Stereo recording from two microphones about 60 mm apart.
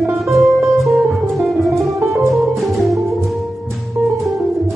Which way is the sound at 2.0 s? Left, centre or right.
Right.